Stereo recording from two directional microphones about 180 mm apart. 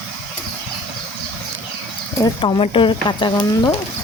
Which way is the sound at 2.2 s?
30° left (ahead or behind).